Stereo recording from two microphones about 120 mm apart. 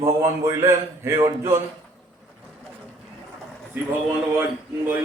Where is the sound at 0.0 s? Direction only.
20° right (ahead or behind).